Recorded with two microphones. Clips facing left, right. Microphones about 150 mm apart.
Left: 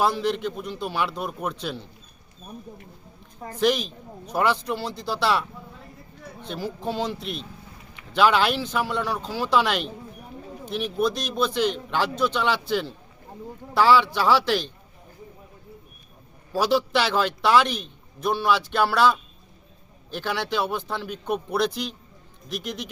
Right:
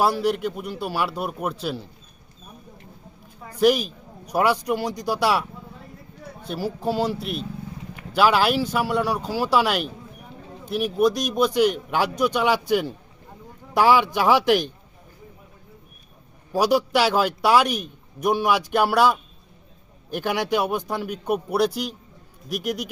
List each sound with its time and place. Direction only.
0.0 s a man's voice: 10° right (ahead or behind)
3.5 s a man's voice: 10° right (ahead or behind)
16.5 s a man's voice: 15° right (ahead or behind)